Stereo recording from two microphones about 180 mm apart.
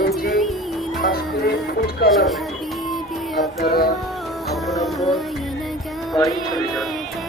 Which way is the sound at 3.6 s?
60° left (ahead or behind).